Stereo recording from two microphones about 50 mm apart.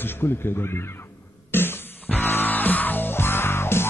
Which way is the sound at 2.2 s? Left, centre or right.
Left.